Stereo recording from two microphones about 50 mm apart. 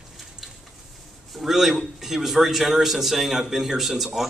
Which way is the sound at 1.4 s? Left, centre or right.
Centre.